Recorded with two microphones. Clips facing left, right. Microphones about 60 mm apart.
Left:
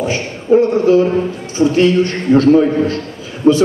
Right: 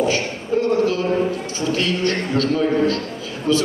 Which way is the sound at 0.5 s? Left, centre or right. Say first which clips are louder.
Left 8 dB; left.